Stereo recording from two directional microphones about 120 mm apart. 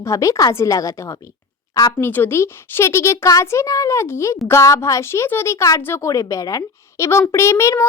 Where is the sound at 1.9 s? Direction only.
20° left (ahead or behind).